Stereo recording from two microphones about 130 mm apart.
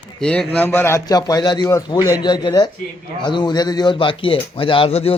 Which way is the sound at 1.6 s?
20° left (ahead or behind).